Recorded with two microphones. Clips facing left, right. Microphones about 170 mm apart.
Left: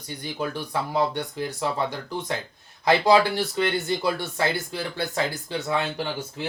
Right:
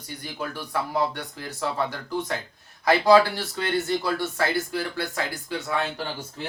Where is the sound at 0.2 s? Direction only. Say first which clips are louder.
Left 4 dB; 20° left (ahead or behind).